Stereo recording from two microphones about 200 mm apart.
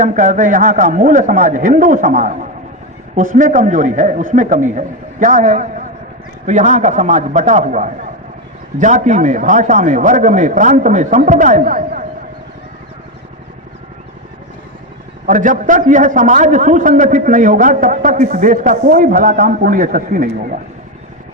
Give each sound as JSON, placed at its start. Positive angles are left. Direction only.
{"t": 0.0, "sound": "a man's voice", "side_deg": -40}
{"t": 15.3, "sound": "a man's voice", "side_deg": -40}